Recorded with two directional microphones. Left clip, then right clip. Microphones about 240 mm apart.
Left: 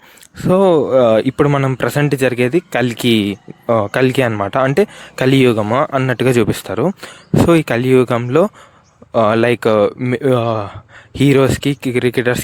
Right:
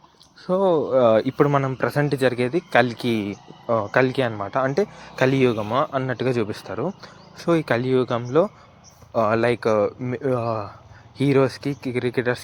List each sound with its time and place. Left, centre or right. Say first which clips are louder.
0.3 s speech: left 8 dB; left